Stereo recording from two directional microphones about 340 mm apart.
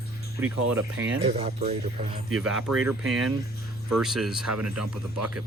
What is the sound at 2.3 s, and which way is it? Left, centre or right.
Speech, centre.